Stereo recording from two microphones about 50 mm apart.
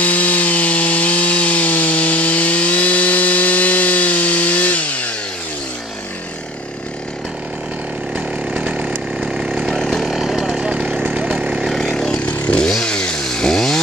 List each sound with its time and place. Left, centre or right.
0.0 s wood: left
8.5 s chainsaw: right
9.8 s chainsaw: centre
10.0 s a sound: centre
11.1 s a sound: right
11.8 s vehicle: centre
12.3 s chainsaw: left
12.6 s chainsaw: centre